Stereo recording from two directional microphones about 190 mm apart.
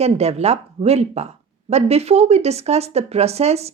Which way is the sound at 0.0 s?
35° right (ahead or behind).